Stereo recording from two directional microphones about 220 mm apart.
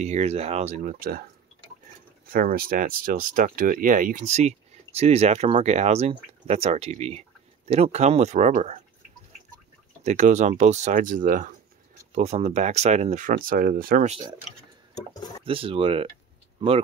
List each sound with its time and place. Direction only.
0.0 s speech: 30° right (ahead or behind)
2.3 s speech: 40° right (ahead or behind)
10.0 s speech: 35° right (ahead or behind)
15.4 s speech: 25° right (ahead or behind)